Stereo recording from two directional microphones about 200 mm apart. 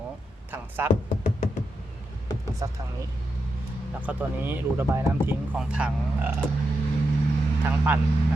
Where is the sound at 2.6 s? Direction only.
20° right (ahead or behind).